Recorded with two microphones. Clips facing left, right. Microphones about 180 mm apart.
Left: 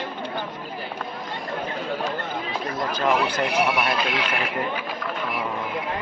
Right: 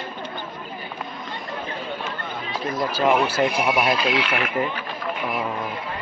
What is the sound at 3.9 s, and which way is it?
Speech, 55° left (ahead or behind).